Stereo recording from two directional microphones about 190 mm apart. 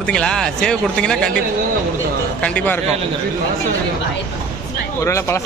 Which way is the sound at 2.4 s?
10° left (ahead or behind).